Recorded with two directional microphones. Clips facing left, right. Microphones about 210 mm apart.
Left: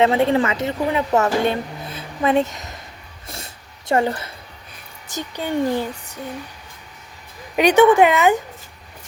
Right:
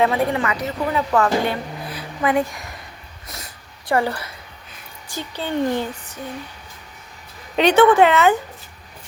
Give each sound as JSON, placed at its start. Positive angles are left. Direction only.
{"t": 0.0, "sound": "speech", "side_deg": 25}
{"t": 3.2, "sound": "a sound", "side_deg": 30}
{"t": 5.3, "sound": "a child's voice", "side_deg": 10}
{"t": 7.5, "sound": "a child's voice", "side_deg": 10}